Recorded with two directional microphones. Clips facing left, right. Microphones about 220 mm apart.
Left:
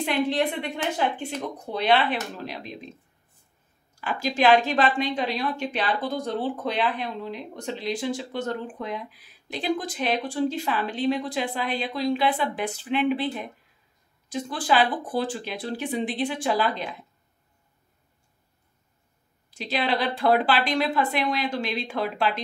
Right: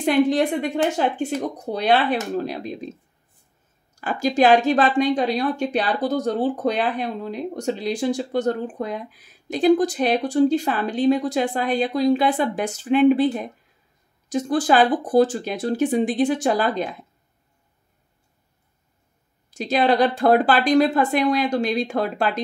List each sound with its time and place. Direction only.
0.0 s speech: 45° right (ahead or behind)
4.0 s speech: 40° right (ahead or behind)
19.5 s speech: 45° right (ahead or behind)